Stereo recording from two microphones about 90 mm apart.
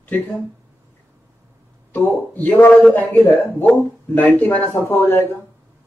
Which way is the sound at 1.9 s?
20° left (ahead or behind).